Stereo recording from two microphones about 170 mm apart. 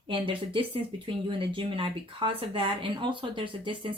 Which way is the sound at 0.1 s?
30° right (ahead or behind).